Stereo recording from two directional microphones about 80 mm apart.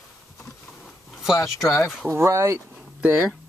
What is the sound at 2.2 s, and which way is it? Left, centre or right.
Speech, right.